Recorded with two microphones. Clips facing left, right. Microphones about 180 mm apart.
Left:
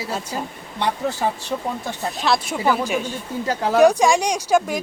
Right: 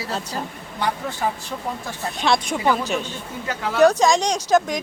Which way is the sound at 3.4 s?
40° left (ahead or behind).